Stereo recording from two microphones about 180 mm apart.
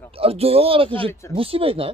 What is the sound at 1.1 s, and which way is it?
Speech, 15° left (ahead or behind).